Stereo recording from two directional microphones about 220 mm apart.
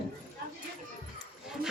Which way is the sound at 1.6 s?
40° right (ahead or behind).